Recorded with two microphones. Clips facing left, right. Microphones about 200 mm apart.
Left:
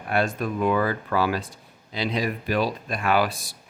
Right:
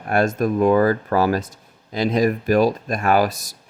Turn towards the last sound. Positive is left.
turn(degrees=-40)  # may be behind; listen again after turning